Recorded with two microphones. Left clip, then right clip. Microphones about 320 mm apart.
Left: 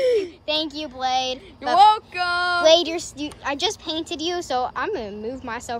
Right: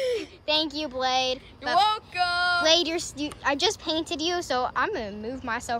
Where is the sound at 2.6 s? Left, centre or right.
Centre.